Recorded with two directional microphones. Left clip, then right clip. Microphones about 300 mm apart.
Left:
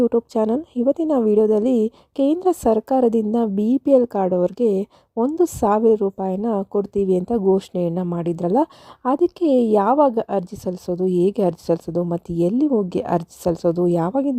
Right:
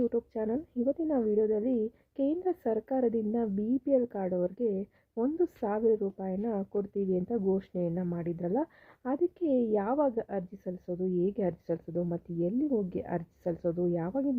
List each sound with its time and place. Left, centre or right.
0.0 s a woman's voice: left